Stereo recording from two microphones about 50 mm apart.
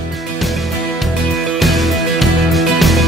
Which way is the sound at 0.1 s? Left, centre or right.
Centre.